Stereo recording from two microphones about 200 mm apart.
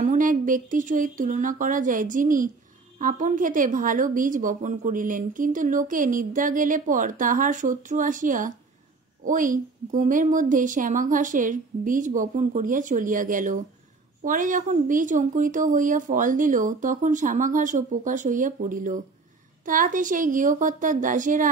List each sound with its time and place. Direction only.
0.0 s a woman's voice: 40° right (ahead or behind)